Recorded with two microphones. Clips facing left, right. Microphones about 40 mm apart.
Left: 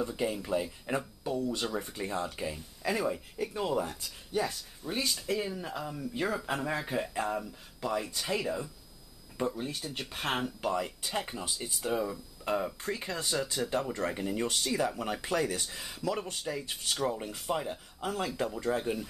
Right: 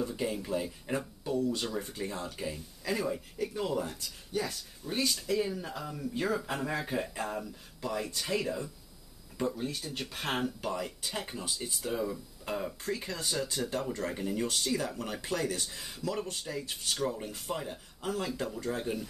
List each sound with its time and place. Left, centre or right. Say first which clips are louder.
0.0 s speech: left 1 dB; centre